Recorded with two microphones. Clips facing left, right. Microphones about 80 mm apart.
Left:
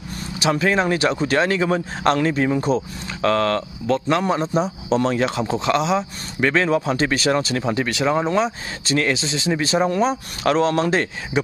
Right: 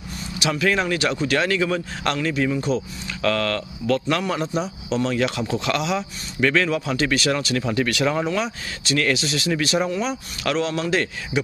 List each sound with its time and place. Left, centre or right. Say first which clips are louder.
0.4 s speech: left 3 dB; left
9.8 s speech: left 5 dB; left